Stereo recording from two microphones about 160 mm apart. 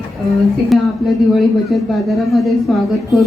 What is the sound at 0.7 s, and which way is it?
A man's voice, centre (ahead or behind).